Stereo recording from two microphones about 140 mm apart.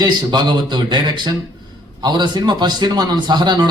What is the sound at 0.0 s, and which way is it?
A man's voice, 30° right (ahead or behind).